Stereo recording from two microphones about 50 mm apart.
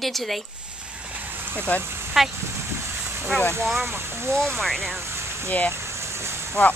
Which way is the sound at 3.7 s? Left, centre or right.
Right.